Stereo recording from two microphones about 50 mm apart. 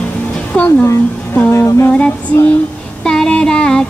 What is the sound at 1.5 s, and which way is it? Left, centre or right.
Music, left.